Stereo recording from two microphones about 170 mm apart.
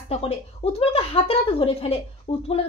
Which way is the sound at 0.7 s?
35° left (ahead or behind).